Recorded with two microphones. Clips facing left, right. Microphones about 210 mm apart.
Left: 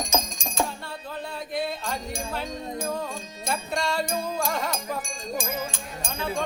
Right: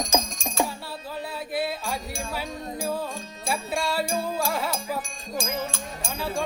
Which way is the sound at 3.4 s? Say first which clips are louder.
Even; 5° right (ahead or behind).